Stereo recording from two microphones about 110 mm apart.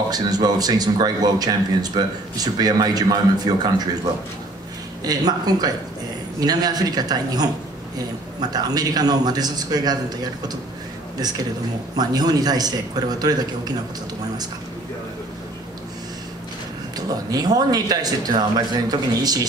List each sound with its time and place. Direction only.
0.1 s speech: 35° right (ahead or behind)
5.0 s speech: 35° right (ahead or behind)
16.9 s speech: 35° right (ahead or behind)